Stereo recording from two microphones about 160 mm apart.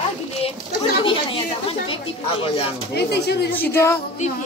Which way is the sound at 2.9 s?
90° left.